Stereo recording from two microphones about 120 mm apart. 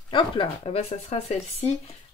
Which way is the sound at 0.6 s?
60° left (ahead or behind).